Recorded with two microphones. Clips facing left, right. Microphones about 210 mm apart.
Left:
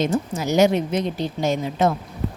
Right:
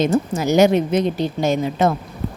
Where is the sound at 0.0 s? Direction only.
75° right (ahead or behind).